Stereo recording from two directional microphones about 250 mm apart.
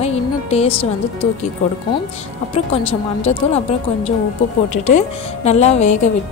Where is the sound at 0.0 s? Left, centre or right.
Left.